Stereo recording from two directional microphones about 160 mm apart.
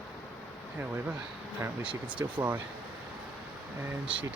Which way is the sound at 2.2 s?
15° right (ahead or behind).